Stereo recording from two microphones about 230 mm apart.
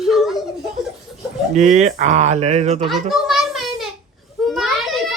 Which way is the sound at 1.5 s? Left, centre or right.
Right.